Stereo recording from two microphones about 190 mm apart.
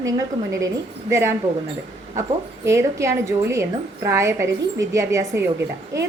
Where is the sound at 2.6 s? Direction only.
15° right (ahead or behind).